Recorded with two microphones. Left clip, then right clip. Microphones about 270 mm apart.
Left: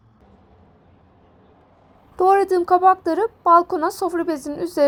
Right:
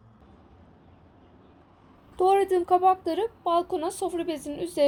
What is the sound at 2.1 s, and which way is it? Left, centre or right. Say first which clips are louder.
Speech: left 6 dB; centre.